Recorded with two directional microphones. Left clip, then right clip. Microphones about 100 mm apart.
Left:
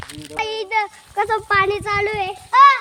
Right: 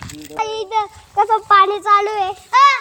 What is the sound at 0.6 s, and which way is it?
Speech, 40° left (ahead or behind).